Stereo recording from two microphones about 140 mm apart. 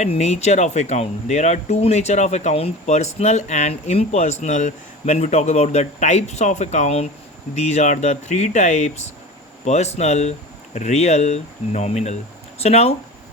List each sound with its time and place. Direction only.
0.0 s speech: 50° left (ahead or behind)